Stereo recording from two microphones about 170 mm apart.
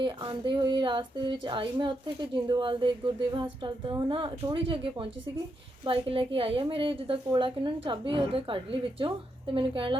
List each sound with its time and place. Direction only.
0.0 s a woman's voice: 30° right (ahead or behind)